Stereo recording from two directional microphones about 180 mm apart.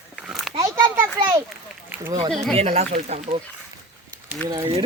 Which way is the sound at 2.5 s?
35° right (ahead or behind).